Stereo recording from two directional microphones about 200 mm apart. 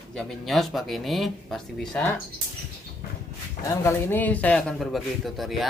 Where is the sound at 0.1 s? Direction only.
Centre (ahead or behind).